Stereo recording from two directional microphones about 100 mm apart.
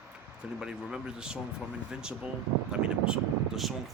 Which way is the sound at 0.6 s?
5° right (ahead or behind).